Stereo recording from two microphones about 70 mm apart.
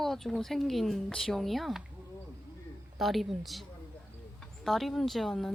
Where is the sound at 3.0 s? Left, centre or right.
Centre.